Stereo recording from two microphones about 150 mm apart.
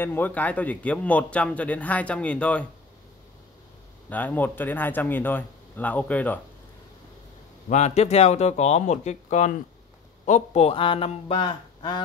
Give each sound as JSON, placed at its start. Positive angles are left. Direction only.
{"t": 0.0, "sound": "a man's voice", "side_deg": 15}
{"t": 4.1, "sound": "a man's voice", "side_deg": 10}
{"t": 7.7, "sound": "speech", "side_deg": 50}